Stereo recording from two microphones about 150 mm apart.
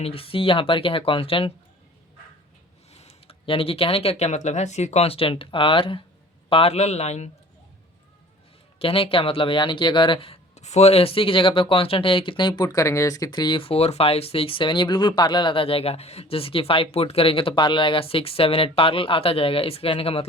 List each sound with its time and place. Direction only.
0.0 s speech: 40° left (ahead or behind)
2.9 s speech: 45° left (ahead or behind)
8.8 s speech: 40° left (ahead or behind)